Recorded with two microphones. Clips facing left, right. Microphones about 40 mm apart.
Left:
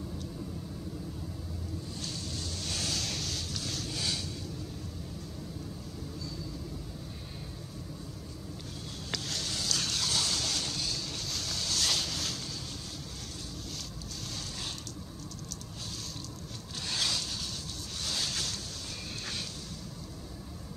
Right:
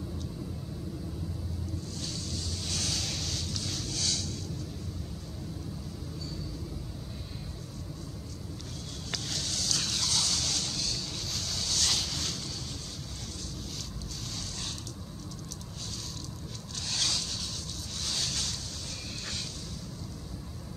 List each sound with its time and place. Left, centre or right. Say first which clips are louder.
2.0 s waves: right 1 dB; centre
3.9 s vehicle: right 1 dB; centre
9.1 s vehicle: even; centre
16.9 s vehicle: even; centre
18.0 s ocean: even; centre